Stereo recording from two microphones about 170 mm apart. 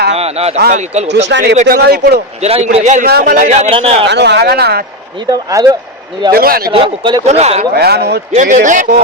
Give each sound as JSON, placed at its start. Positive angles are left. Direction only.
{"t": 0.1, "sound": "a sound", "side_deg": -40}
{"t": 0.7, "sound": "a man's voice", "side_deg": -40}
{"t": 1.3, "sound": "speech", "side_deg": -90}
{"t": 1.6, "sound": "speech", "side_deg": -65}
{"t": 2.4, "sound": "a man's voice", "side_deg": -40}
{"t": 3.1, "sound": "speech", "side_deg": -65}
{"t": 3.4, "sound": "speech", "side_deg": -40}
{"t": 4.0, "sound": "speech", "side_deg": -90}
{"t": 5.3, "sound": "speech", "side_deg": -20}
{"t": 6.3, "sound": "speech", "side_deg": -60}
{"t": 6.7, "sound": "speech", "side_deg": -30}
{"t": 7.7, "sound": "speech", "side_deg": -70}
{"t": 8.3, "sound": "a man's voice", "side_deg": -45}